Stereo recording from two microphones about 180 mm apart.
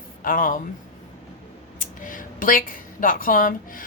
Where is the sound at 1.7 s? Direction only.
45° left (ahead or behind).